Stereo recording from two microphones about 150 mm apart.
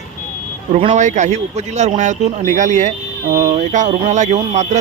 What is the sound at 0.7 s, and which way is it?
Speech, 50° right (ahead or behind).